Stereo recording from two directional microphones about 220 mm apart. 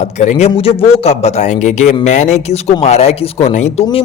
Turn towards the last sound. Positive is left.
turn(degrees=30)  # may be behind; listen again after turning